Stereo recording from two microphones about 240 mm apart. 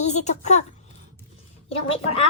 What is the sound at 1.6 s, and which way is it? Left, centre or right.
Speech, left.